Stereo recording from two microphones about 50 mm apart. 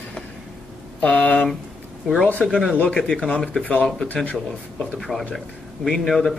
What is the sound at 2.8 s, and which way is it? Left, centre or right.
Speech, left.